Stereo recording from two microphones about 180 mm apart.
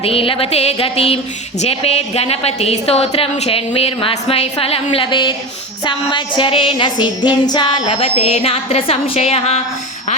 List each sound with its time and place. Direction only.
0.0 s a woman's voice: 30° left (ahead or behind)
5.8 s music: 25° left (ahead or behind)